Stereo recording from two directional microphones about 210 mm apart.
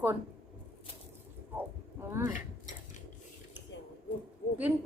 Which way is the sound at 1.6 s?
10° right (ahead or behind).